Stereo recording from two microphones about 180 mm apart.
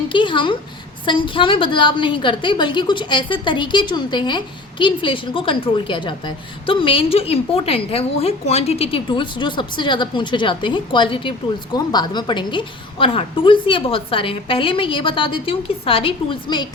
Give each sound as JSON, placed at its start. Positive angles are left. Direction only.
{"t": 0.1, "sound": "a woman's voice", "side_deg": 25}